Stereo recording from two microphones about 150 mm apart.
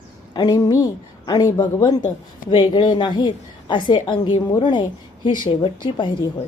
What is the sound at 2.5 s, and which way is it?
A woman's voice, 30° left (ahead or behind).